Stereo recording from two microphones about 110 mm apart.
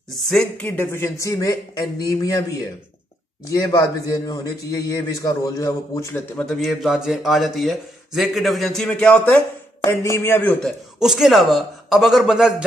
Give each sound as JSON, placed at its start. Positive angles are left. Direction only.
{"t": 0.3, "sound": "speech", "side_deg": 15}
{"t": 3.5, "sound": "a man's voice", "side_deg": 35}
{"t": 6.3, "sound": "a man's voice", "side_deg": 5}
{"t": 9.8, "sound": "speech", "side_deg": 20}
{"t": 11.0, "sound": "a man's voice", "side_deg": -5}